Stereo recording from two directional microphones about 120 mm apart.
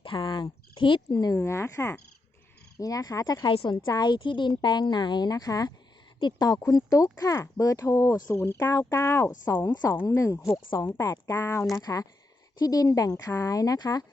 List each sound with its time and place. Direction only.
0.2 s a sound: 35° left (ahead or behind)
1.0 s a woman's voice: 30° left (ahead or behind)
3.5 s a woman's voice: 50° left (ahead or behind); by 11.6 s 20° left (ahead or behind)
11.7 s a woman's voice: 30° left (ahead or behind)